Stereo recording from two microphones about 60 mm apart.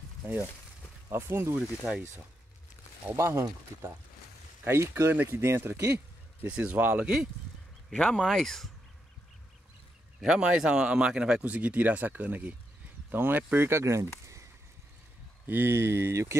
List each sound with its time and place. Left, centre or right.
0.2 s speech: right
3.1 s speech: right
6.4 s speech: right
7.9 s speech: centre
10.2 s speech: centre
11.4 s speech: right
13.7 s speech: right
15.4 s speech: right